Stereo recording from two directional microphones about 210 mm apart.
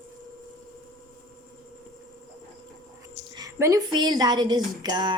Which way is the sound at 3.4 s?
15° right (ahead or behind).